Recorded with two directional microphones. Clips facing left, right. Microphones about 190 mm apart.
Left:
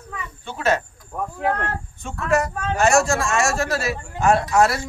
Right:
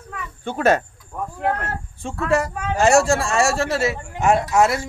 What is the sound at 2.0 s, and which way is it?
A man's voice, 30° right (ahead or behind).